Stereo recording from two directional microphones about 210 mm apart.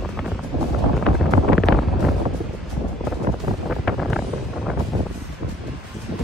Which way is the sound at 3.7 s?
Centre (ahead or behind).